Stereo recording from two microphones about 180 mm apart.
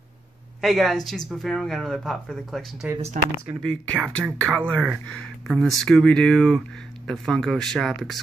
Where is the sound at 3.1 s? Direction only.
45° right (ahead or behind).